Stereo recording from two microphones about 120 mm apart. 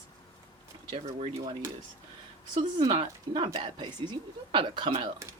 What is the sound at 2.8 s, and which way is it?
Speech, 45° right (ahead or behind).